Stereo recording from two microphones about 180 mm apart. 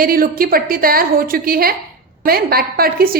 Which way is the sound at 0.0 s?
55° right (ahead or behind).